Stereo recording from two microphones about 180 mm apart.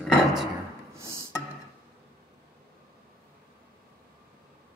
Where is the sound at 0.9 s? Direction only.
15° right (ahead or behind).